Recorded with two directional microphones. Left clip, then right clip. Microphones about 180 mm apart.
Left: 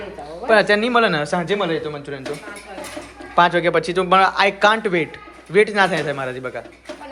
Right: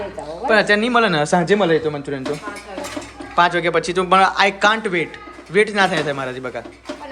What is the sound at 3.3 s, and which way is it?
Speech, 5° right (ahead or behind).